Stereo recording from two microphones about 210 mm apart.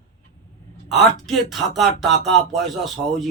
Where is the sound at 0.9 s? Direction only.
Centre (ahead or behind).